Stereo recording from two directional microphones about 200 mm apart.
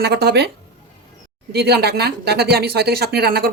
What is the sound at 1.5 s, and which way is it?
Speech, 55° right (ahead or behind).